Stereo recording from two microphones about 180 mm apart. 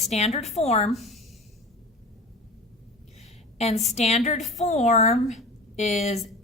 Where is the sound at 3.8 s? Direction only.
40° left (ahead or behind).